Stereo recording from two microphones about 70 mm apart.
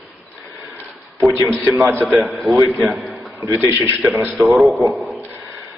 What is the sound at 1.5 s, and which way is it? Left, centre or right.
Speech, right.